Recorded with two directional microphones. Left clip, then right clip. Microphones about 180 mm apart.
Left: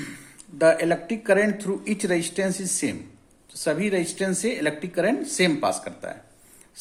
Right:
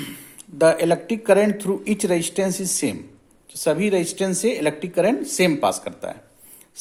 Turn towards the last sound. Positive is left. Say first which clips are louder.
# right 2 dB
turn(degrees=-30)  # may be behind; listen again after turning